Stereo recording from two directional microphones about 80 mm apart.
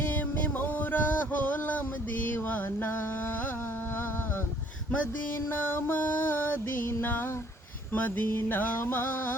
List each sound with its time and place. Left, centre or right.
0.6 s music: left
5.6 s music: left
7.9 s a sound: left